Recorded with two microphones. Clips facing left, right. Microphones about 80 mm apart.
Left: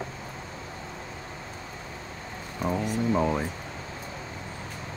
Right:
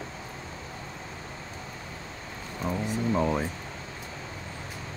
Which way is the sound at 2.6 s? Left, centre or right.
Centre.